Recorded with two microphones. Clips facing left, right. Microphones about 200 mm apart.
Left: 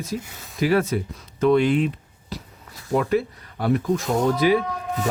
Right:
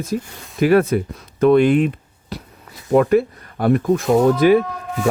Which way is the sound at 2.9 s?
55° right (ahead or behind).